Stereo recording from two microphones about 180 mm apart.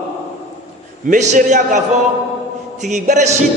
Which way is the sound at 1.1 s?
45° right (ahead or behind).